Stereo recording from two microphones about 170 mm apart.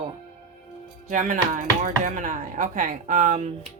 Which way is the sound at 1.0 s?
50° right (ahead or behind).